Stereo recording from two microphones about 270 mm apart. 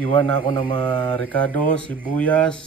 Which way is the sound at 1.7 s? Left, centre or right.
Centre.